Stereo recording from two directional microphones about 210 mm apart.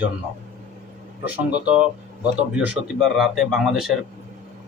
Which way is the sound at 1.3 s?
5° right (ahead or behind).